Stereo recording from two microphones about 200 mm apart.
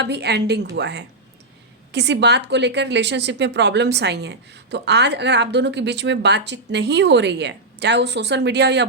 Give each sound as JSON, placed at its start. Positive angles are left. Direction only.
{"t": 0.0, "sound": "a woman's voice", "side_deg": -55}